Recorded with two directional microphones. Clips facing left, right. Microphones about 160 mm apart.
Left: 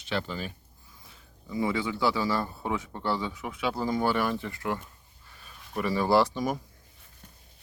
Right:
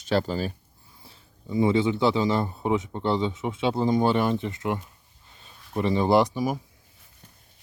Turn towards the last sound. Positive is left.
turn(degrees=-10)  # may be behind; listen again after turning